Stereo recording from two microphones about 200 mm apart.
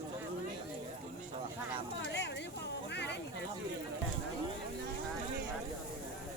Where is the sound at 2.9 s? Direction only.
60° left (ahead or behind).